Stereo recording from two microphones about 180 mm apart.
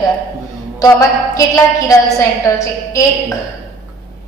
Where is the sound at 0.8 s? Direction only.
20° left (ahead or behind).